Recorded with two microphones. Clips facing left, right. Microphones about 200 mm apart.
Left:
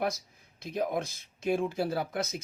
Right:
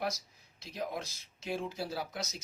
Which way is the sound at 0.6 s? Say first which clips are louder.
Left 7 dB; 55° left (ahead or behind).